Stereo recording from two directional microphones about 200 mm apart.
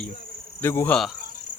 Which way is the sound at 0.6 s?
10° left (ahead or behind).